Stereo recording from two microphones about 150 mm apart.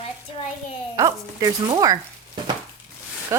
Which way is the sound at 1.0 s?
25° right (ahead or behind).